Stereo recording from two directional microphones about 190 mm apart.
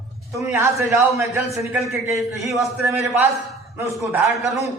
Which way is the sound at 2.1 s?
Centre (ahead or behind).